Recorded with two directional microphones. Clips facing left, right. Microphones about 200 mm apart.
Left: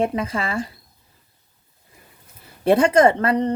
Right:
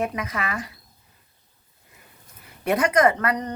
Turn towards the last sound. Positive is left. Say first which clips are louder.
# left 4 dB
turn(degrees=30)  # may be behind; listen again after turning